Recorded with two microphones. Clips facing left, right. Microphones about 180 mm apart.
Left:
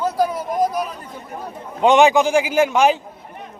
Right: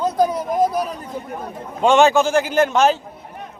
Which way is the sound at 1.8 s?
15° left (ahead or behind).